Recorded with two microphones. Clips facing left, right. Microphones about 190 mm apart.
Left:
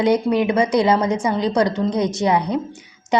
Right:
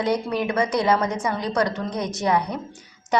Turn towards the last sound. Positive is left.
turn(degrees=20)  # may be behind; listen again after turning